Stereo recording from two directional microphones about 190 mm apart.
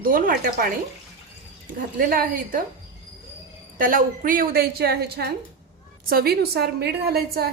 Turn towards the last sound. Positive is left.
turn(degrees=-55)  # may be behind; listen again after turning